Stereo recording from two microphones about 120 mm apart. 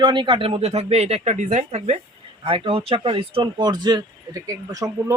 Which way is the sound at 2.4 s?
45° right (ahead or behind).